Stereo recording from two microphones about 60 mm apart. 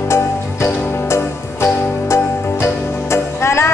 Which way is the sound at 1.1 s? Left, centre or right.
Left.